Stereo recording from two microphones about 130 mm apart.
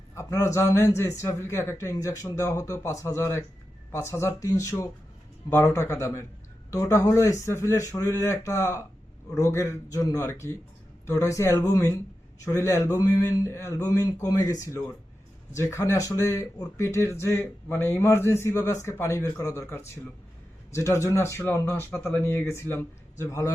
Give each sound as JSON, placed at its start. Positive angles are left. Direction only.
{"t": 0.1, "sound": "speech", "side_deg": 20}